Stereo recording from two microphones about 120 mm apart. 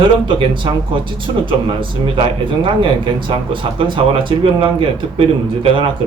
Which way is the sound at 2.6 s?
45° right (ahead or behind).